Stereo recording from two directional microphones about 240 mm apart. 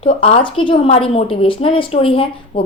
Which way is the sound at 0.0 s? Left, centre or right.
Left.